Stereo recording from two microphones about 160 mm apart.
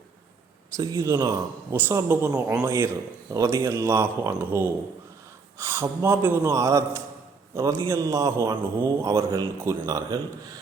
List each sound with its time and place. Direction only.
0.8 s speech: 20° right (ahead or behind)